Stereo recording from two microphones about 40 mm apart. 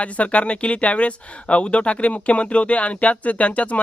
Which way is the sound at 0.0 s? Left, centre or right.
Left.